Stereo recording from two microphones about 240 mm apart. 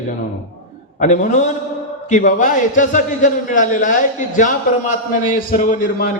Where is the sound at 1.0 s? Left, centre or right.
Left.